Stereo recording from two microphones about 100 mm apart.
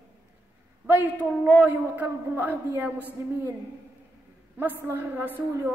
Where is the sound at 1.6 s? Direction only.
20° right (ahead or behind).